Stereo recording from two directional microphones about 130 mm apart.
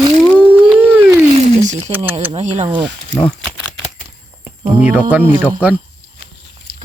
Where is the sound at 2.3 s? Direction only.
60° right (ahead or behind).